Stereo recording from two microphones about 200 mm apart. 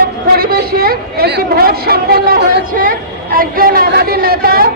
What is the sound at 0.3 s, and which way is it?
A woman's voice, 50° right (ahead or behind).